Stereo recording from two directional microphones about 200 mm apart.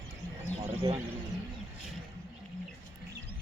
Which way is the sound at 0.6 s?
30° right (ahead or behind).